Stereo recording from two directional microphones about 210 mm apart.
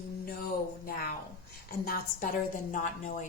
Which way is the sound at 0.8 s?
45° left (ahead or behind).